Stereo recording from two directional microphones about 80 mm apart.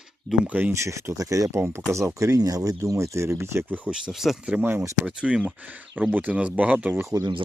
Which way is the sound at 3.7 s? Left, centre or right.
Right.